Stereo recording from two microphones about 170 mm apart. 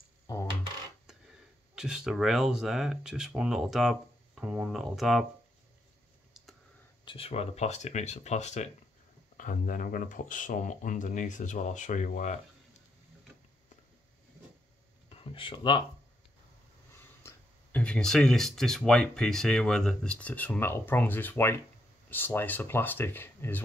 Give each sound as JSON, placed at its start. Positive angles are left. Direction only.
{"t": 0.3, "sound": "coin", "side_deg": 20}
{"t": 1.8, "sound": "speech", "side_deg": -5}
{"t": 7.1, "sound": "speech", "side_deg": 35}
{"t": 15.0, "sound": "a sound", "side_deg": 30}
{"t": 16.9, "sound": "speech", "side_deg": 15}